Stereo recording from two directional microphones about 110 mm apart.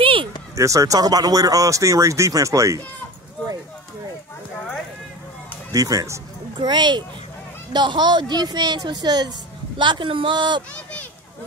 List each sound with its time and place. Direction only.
0.0 s a sound: 55° right (ahead or behind)
0.6 s speech: 30° right (ahead or behind)
5.7 s speech: 30° right (ahead or behind)
6.6 s speech: 45° right (ahead or behind)
10.7 s a child's voice: 15° left (ahead or behind)